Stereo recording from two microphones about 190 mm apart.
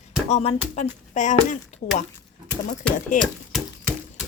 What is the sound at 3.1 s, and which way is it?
Speech, 45° left (ahead or behind).